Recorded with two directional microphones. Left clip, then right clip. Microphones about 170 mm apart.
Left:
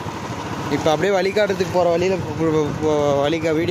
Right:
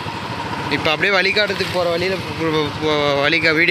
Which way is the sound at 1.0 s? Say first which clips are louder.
Right 3 dB; 15° left (ahead or behind).